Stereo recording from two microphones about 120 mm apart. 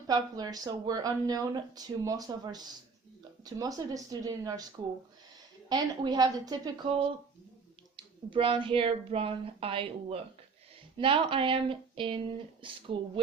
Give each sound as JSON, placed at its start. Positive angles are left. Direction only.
{"t": 0.1, "sound": "speech", "side_deg": -30}
{"t": 5.6, "sound": "speech", "side_deg": -35}
{"t": 7.9, "sound": "a woman's voice", "side_deg": -45}